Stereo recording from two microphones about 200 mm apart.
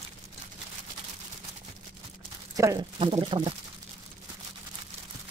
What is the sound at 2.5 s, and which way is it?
Speech, 15° right (ahead or behind).